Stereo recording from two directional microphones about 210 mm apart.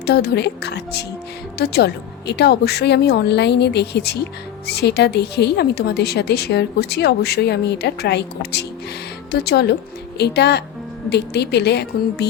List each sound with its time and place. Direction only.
0.0 s speech: 50° left (ahead or behind)